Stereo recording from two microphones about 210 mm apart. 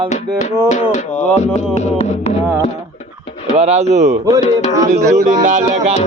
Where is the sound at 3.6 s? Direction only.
30° right (ahead or behind).